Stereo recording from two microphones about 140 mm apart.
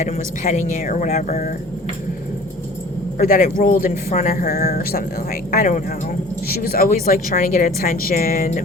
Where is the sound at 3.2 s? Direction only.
90° left.